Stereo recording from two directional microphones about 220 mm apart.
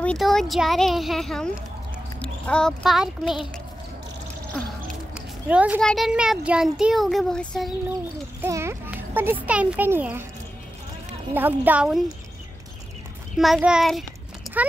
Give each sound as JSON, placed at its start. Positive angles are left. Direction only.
{"t": 0.0, "sound": "a child's voice", "side_deg": 5}
{"t": 5.1, "sound": "a sound", "side_deg": -5}
{"t": 5.9, "sound": "a child's voice", "side_deg": 0}
{"t": 8.4, "sound": "a child's voice", "side_deg": -10}
{"t": 11.3, "sound": "a child's voice", "side_deg": -10}
{"t": 13.4, "sound": "a child's voice", "side_deg": 0}